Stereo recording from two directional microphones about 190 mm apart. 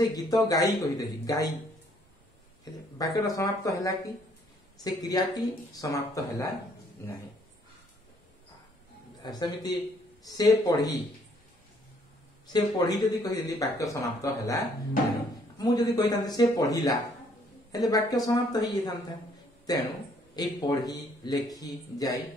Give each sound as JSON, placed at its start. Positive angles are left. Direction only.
{"t": 0.1, "sound": "a man's voice", "side_deg": 20}
{"t": 3.0, "sound": "a man's voice", "side_deg": 20}
{"t": 9.2, "sound": "a man's voice", "side_deg": 20}
{"t": 12.5, "sound": "a man's voice", "side_deg": 20}